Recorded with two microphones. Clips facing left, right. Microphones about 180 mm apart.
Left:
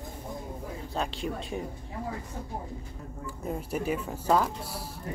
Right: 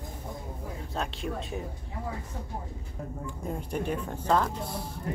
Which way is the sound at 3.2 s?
5° left (ahead or behind).